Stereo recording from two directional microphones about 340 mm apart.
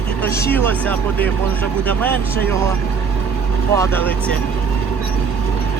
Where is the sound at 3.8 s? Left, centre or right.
Centre.